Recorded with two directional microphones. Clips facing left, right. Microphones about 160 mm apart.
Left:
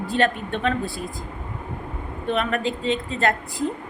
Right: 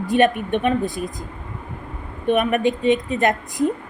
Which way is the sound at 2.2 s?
15° right (ahead or behind).